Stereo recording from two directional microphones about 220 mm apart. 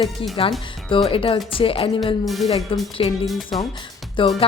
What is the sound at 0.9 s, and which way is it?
Speech, 25° left (ahead or behind).